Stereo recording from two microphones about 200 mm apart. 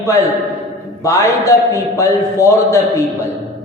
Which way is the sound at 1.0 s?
15° left (ahead or behind).